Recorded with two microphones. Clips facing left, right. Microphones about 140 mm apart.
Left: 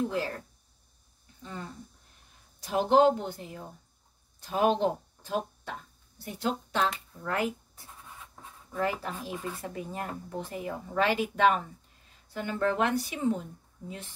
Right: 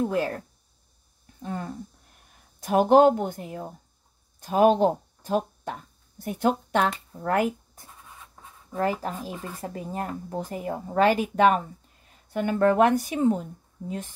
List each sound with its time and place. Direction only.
0.0 s a woman's voice: 50° right (ahead or behind)
1.4 s a woman's voice: 55° right (ahead or behind)